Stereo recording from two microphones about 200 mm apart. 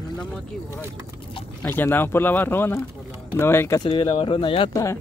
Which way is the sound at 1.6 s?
10° left (ahead or behind).